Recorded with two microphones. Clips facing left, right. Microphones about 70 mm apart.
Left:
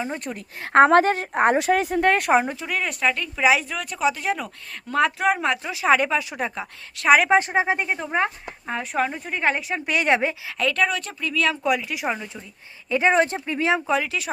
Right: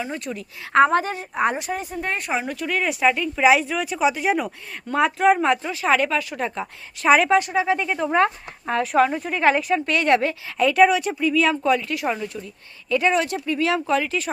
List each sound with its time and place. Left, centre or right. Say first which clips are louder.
0.3 s speech: even; left
0.9 s a woman's voice: left 5 dB; left
1.3 s speech: left 3 dB; left
1.5 s speech: left 8 dB; left
2.6 s speech: right 3 dB; centre
5.7 s speech: left 1 dB; centre
6.6 s speech: right 3 dB; centre
7.3 s speech: even; left
8.7 s speech: right 6 dB; centre
9.8 s speech: left 2 dB; centre
10.6 s speech: right 7 dB; centre
11.6 s speech: right 2 dB; centre
12.9 s speech: left 1 dB; left
13.8 s speech: right 1 dB; centre